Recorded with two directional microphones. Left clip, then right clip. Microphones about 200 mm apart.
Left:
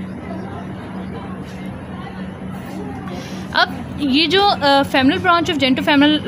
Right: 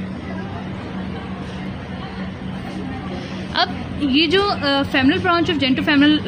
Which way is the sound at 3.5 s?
60° left (ahead or behind).